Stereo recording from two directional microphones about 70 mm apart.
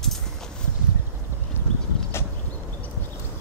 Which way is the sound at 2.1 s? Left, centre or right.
Left.